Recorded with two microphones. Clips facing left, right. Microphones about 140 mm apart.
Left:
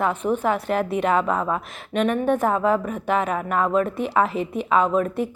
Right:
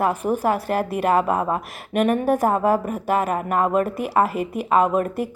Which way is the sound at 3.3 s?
45° right (ahead or behind).